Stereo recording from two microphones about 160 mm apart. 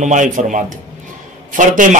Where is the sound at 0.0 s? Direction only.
50° right (ahead or behind).